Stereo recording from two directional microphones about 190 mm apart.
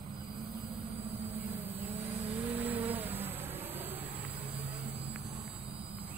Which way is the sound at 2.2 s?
10° right (ahead or behind).